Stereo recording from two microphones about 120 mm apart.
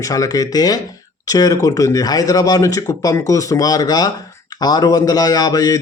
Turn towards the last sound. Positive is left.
turn(degrees=30)  # may be behind; listen again after turning